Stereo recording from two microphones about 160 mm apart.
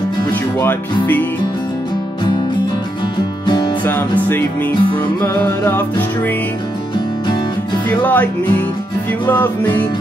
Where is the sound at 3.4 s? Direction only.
30° left (ahead or behind).